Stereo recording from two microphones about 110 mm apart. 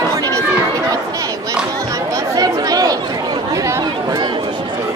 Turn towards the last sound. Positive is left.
turn(degrees=-40)  # may be behind; listen again after turning